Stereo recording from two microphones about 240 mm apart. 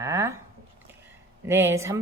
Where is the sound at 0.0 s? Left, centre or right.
Centre.